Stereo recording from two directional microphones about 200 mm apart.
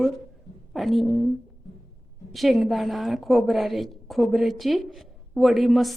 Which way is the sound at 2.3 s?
Centre (ahead or behind).